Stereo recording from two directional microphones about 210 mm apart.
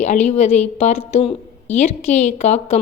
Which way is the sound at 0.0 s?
35° left (ahead or behind).